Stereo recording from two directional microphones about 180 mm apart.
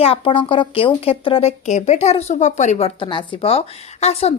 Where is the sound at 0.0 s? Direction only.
30° left (ahead or behind).